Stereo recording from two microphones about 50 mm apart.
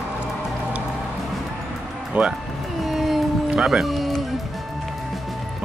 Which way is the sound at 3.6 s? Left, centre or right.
Centre.